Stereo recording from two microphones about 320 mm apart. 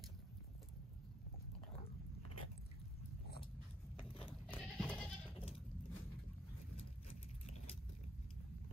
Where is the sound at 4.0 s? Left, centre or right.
Centre.